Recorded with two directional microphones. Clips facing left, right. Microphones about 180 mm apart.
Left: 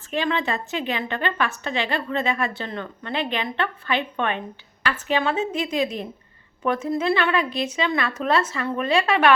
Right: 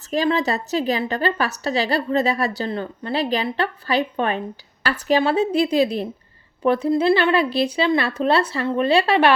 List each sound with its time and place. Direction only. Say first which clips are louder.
0.1 s a woman's voice: right 4 dB; 40° right (ahead or behind)